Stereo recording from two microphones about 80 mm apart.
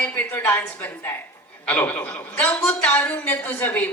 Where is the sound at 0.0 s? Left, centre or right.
Centre.